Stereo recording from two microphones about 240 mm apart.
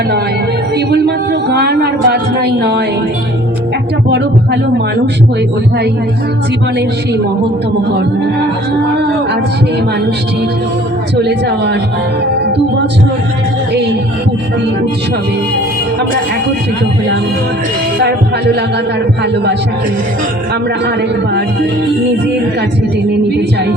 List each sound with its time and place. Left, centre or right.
0.9 s speech: right
11.2 s speech: right